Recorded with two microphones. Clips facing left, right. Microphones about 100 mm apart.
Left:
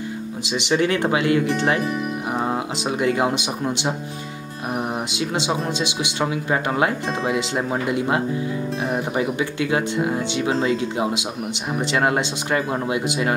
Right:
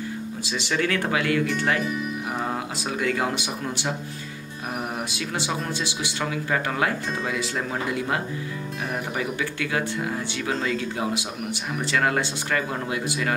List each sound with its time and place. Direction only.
0.4 s speech: 20° left (ahead or behind)
5.1 s speech: 20° left (ahead or behind)